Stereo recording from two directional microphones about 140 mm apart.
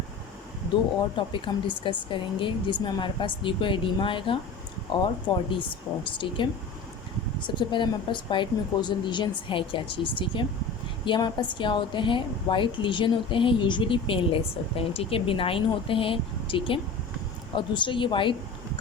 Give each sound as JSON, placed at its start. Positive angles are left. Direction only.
{"t": 1.1, "sound": "a woman's voice", "side_deg": 35}
{"t": 6.1, "sound": "a woman's voice", "side_deg": 35}